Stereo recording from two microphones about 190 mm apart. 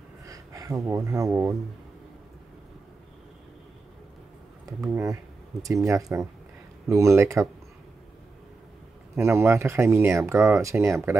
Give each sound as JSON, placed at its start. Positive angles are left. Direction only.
{"t": 0.2, "sound": "speech", "side_deg": -20}
{"t": 4.8, "sound": "speech", "side_deg": -15}
{"t": 9.1, "sound": "speech", "side_deg": -15}